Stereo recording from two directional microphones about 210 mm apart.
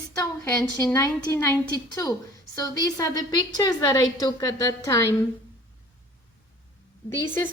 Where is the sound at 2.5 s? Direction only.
15° left (ahead or behind).